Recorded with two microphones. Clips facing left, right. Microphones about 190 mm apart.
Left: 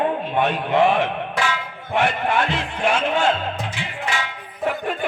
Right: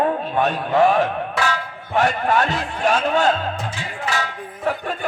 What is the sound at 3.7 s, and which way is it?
Music, 40° right (ahead or behind).